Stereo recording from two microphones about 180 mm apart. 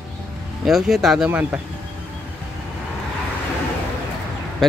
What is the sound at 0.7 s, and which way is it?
Speech, centre (ahead or behind).